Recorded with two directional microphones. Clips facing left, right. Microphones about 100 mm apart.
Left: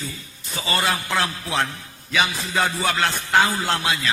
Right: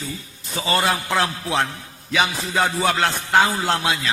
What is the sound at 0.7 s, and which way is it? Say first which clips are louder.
Music: right 2 dB; 25° right (ahead or behind).